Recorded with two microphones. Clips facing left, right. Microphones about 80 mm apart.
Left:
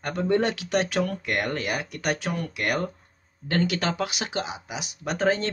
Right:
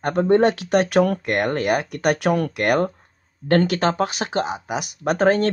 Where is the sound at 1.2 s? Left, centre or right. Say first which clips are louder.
Right 6 dB; right.